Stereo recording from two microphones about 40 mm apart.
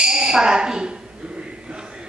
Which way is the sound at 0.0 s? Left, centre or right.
Centre.